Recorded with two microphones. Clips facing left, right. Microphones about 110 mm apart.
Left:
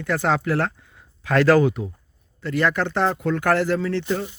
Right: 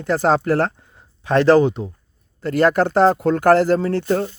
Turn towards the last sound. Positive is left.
turn(degrees=-45)  # may be behind; listen again after turning